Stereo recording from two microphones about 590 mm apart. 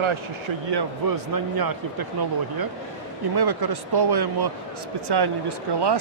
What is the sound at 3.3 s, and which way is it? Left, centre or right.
Speech, right.